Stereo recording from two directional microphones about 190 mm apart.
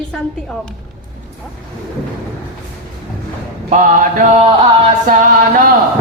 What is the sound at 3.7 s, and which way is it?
Mantra, 45° right (ahead or behind).